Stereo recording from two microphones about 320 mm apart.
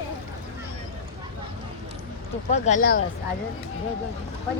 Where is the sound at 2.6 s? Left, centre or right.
Left.